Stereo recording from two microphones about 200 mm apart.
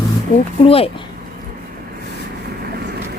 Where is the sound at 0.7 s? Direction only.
30° left (ahead or behind).